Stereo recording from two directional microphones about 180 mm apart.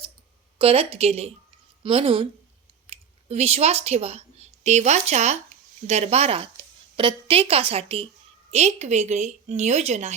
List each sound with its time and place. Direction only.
0.6 s a woman's voice: 35° right (ahead or behind)